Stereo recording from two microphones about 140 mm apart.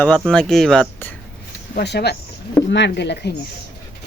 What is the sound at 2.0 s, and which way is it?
Speech, 90° left.